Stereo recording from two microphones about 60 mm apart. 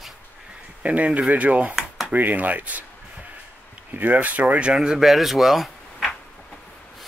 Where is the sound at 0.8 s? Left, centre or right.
Right.